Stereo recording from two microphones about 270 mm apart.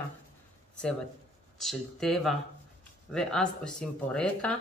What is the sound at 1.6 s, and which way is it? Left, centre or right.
Speech, centre.